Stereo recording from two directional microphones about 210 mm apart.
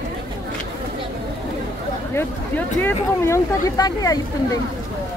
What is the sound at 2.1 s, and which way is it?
Speech, 10° left (ahead or behind).